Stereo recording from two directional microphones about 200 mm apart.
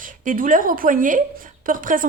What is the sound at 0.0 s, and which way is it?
A woman's voice, 40° right (ahead or behind).